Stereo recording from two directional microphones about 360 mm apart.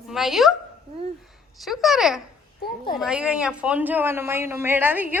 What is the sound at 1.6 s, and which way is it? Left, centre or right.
A woman's voice, centre.